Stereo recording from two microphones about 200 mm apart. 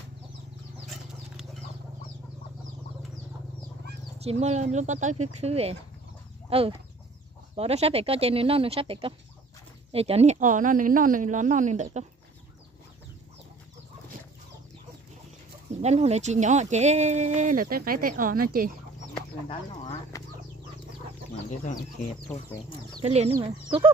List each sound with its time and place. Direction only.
4.2 s speech: 30° right (ahead or behind)
15.8 s speech: 35° right (ahead or behind)
20.1 s bird flight: 15° left (ahead or behind)
22.9 s speech: 30° right (ahead or behind)